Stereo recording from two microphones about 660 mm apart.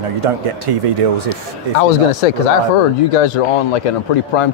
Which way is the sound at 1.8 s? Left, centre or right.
Left.